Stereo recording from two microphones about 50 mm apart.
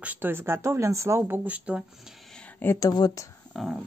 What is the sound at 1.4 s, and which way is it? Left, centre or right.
Speech, right.